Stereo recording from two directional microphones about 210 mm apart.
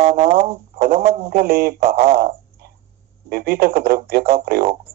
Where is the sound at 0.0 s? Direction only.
30° right (ahead or behind).